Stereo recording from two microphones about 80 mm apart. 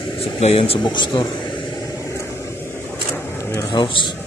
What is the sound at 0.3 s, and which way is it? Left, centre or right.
Speech, left.